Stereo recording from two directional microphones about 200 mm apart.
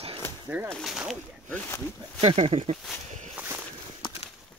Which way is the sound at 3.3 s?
10° right (ahead or behind).